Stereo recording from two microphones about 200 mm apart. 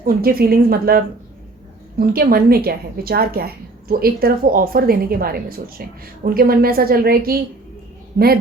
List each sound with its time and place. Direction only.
0.0 s a woman's voice: 50° right (ahead or behind)